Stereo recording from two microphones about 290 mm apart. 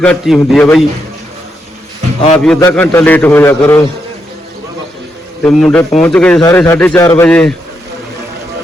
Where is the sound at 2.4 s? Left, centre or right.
Centre.